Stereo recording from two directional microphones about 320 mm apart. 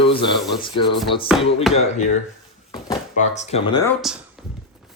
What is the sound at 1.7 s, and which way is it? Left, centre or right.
Speech, left.